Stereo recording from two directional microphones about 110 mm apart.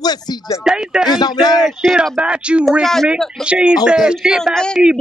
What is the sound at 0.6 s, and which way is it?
Speech, 5° right (ahead or behind).